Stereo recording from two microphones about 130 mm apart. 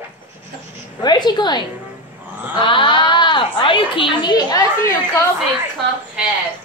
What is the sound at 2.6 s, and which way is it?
Speech, 40° left (ahead or behind).